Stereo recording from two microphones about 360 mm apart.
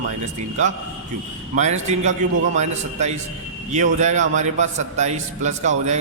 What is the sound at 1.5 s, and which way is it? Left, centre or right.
A man's voice, centre.